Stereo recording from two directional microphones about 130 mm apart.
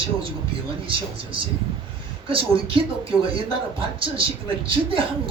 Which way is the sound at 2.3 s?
45° right (ahead or behind).